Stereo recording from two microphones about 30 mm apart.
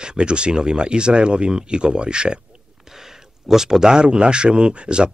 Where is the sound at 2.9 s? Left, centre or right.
Centre; by 5.1 s right.